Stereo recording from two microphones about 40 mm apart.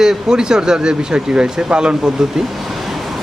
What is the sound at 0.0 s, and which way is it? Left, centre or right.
Speech, centre.